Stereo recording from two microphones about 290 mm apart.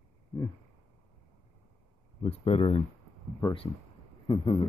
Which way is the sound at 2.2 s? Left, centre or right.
Centre.